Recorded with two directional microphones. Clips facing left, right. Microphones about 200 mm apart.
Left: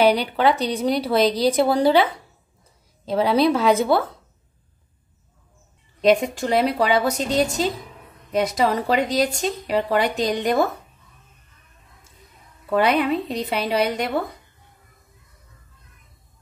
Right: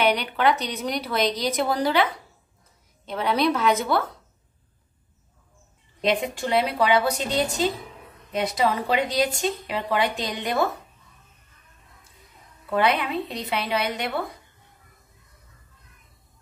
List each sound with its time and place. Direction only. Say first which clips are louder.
0.0 s a woman's voice: left 4 dB; 30° left (ahead or behind)
3.1 s a woman's voice: left 5 dB; 30° left (ahead or behind)
6.0 s speech: left 6 dB; 45° left (ahead or behind)
12.8 s speech: left 4 dB; 40° left (ahead or behind)